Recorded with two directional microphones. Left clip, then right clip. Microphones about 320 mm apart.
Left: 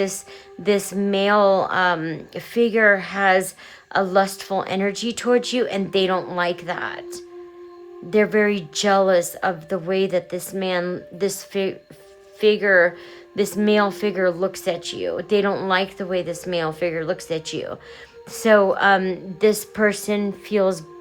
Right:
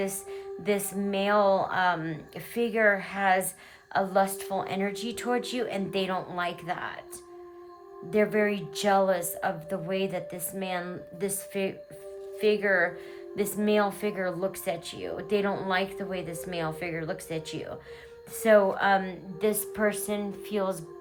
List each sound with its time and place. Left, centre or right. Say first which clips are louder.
0.6 s a woman's voice: left 9 dB; centre